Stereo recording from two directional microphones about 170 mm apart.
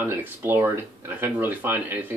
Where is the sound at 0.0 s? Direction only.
10° right (ahead or behind).